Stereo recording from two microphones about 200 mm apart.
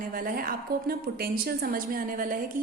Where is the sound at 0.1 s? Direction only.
45° right (ahead or behind).